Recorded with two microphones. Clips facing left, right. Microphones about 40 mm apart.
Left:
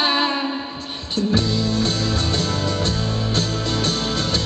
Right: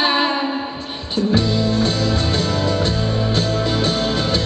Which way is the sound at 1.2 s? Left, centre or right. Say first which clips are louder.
Right 3 dB; centre.